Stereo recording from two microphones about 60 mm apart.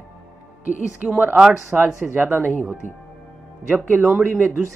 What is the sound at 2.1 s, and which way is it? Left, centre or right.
Speech, right.